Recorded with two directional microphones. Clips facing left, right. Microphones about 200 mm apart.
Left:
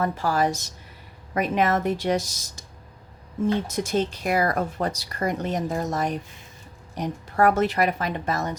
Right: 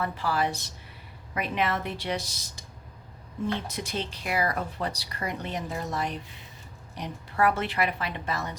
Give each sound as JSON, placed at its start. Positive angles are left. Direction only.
{"t": 0.0, "sound": "speech", "side_deg": 45}